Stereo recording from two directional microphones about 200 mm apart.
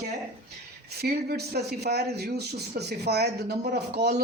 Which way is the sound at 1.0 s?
50° right (ahead or behind).